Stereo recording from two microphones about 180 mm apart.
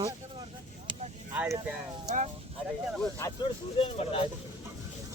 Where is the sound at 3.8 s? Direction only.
30° left (ahead or behind).